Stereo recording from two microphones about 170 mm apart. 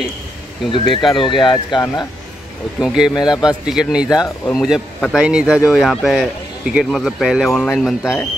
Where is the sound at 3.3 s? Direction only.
25° left (ahead or behind).